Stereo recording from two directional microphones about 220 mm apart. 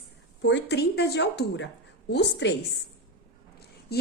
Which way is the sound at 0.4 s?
50° left (ahead or behind).